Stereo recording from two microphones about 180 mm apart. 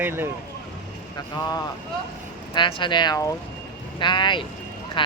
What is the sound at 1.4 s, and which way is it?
Speech, 20° left (ahead or behind).